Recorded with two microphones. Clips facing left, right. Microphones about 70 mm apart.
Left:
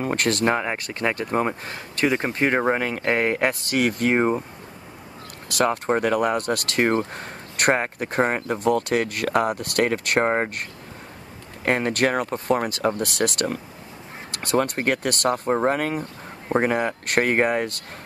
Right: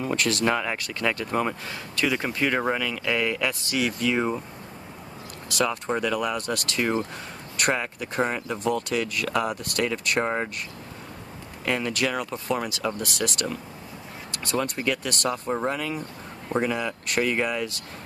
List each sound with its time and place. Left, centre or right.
0.0 s speech: left
0.5 s speech: left
5.5 s speech: left